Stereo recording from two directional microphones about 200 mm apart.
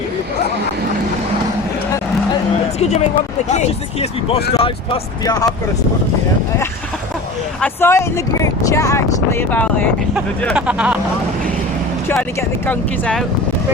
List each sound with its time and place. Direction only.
2.7 s speech: 35° left (ahead or behind)
7.6 s speech: 10° left (ahead or behind)
10.4 s speech: 5° right (ahead or behind)
12.0 s speech: 10° left (ahead or behind)